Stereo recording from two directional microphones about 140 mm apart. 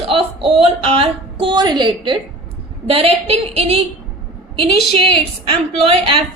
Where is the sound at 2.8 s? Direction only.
45° right (ahead or behind).